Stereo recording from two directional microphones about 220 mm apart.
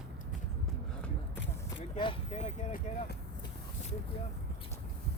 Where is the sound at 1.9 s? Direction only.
25° left (ahead or behind).